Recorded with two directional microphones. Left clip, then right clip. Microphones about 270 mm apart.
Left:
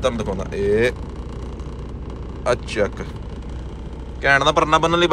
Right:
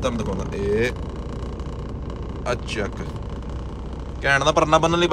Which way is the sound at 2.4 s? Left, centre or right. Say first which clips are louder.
Left 6 dB; centre.